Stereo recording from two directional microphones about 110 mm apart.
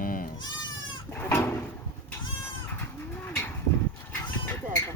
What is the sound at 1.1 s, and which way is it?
Goat, 20° left (ahead or behind).